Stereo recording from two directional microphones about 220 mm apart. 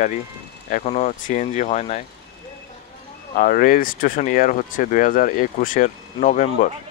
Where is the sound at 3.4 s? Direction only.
40° left (ahead or behind).